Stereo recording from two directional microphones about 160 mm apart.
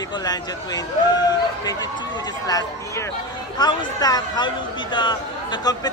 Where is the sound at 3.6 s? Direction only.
25° left (ahead or behind).